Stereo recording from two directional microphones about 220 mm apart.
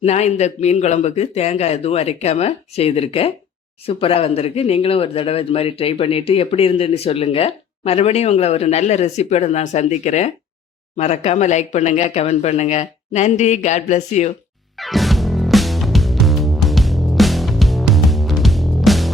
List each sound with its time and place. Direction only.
0.0 s speech: 30° left (ahead or behind)
14.8 s music: centre (ahead or behind)